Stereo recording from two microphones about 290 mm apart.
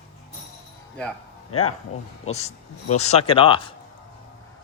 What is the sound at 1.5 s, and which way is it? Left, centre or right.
Speech, left.